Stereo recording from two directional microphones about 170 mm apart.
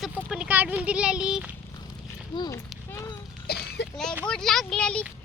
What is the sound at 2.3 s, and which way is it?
Speech, 25° left (ahead or behind).